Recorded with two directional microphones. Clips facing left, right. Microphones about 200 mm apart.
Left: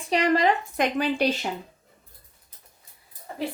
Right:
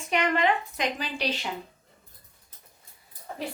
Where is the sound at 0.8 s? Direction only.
55° left (ahead or behind).